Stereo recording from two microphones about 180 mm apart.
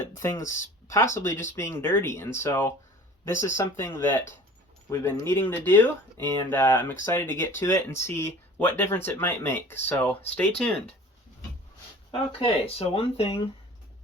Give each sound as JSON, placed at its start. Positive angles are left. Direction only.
{"t": 0.0, "sound": "speech", "side_deg": 15}
{"t": 12.4, "sound": "speech", "side_deg": 35}